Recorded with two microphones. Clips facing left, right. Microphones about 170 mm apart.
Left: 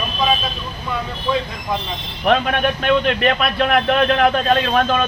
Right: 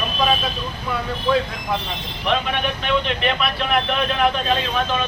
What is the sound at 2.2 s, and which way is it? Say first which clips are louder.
A man's voice: left 5 dB; 50° left (ahead or behind).